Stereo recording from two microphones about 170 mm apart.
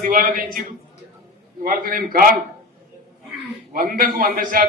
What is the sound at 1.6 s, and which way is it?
Speech, 55° right (ahead or behind).